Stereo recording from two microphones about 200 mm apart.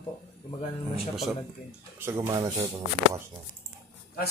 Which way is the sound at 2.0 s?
15° right (ahead or behind).